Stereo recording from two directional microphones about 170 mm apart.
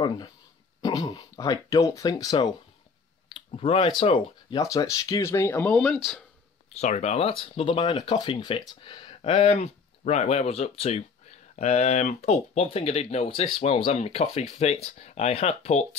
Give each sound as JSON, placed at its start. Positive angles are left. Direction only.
{"t": 0.7, "sound": "speech", "side_deg": 25}
{"t": 3.3, "sound": "clicking", "side_deg": 35}
{"t": 4.0, "sound": "speech", "side_deg": 30}
{"t": 4.6, "sound": "speech", "side_deg": 20}
{"t": 6.7, "sound": "speech", "side_deg": 40}